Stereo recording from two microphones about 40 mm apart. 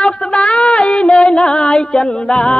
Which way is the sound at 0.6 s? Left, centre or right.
Centre.